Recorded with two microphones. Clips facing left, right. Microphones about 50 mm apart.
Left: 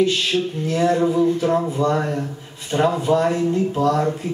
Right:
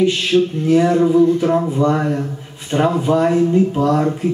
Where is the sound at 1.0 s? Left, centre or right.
Centre.